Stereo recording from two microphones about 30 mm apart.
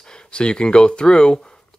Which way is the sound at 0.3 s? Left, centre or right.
Left.